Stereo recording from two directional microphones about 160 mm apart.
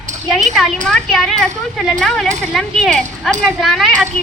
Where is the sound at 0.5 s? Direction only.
Centre (ahead or behind).